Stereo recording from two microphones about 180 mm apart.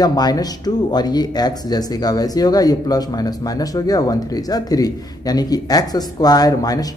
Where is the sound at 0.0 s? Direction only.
20° left (ahead or behind).